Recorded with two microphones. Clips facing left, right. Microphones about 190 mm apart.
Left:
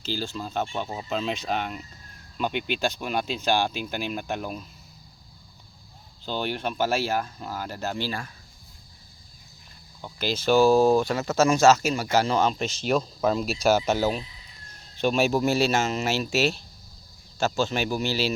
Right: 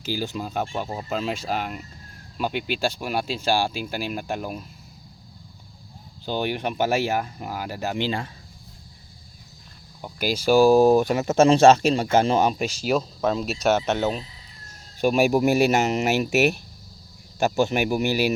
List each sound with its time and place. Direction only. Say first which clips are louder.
0.0 s speech: right 3 dB; 15° right (ahead or behind)
6.2 s speech: right 3 dB; 15° right (ahead or behind)
10.0 s speech: right 3 dB; 10° right (ahead or behind)
15.0 s speech: right 3 dB; 10° right (ahead or behind)